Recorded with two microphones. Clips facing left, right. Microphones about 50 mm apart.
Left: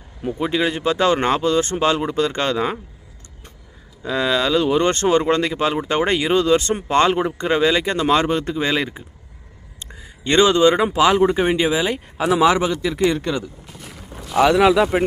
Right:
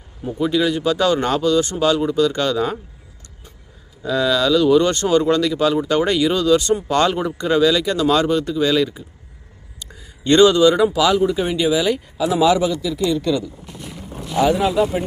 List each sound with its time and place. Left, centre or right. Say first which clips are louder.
0.3 s speech: right 3 dB; left
4.0 s speech: right 2 dB; left
9.8 s a sound: right 3 dB; left
10.9 s speech: left 1 dB; left
12.2 s speech: even; left
13.0 s speech: left 2 dB; left
13.2 s speech: right 3 dB; left
14.3 s speech: left 3 dB; left